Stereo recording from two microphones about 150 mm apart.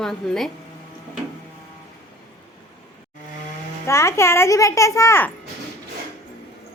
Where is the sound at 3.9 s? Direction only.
20° left (ahead or behind).